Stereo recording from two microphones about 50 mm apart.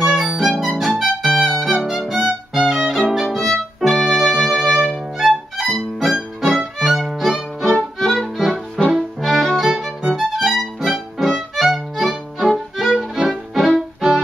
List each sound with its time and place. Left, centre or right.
0.0 s music: centre
2.7 s violin: centre
3.3 s violin: centre
8.0 s music: centre
9.8 s violin: centre
10.1 s music: centre
13.3 s music: centre